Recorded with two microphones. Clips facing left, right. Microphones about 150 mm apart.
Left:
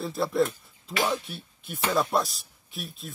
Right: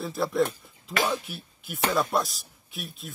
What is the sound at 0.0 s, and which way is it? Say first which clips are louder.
Speech: even; centre (ahead or behind).